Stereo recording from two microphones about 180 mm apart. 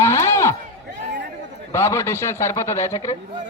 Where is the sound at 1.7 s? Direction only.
15° left (ahead or behind).